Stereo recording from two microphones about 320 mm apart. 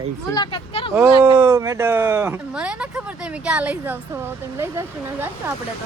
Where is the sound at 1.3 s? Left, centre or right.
Centre.